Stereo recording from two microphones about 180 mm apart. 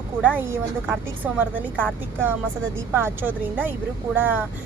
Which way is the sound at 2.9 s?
10° right (ahead or behind).